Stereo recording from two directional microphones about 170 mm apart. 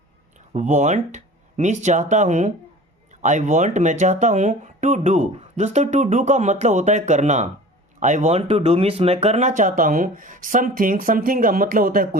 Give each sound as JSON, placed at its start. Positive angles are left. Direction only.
{"t": 0.3, "sound": "speech", "side_deg": -45}